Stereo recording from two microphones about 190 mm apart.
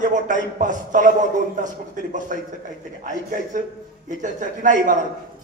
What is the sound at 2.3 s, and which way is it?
A man's voice, 45° right (ahead or behind).